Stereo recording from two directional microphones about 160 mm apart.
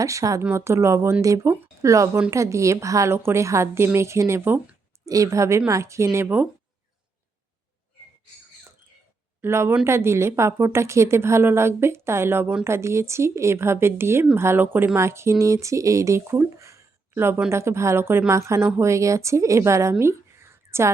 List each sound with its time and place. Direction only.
0.0 s a woman's voice: 20° right (ahead or behind)
9.4 s a woman's voice: 15° right (ahead or behind)